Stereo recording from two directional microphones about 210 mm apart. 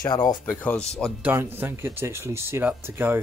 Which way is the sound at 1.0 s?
10° right (ahead or behind).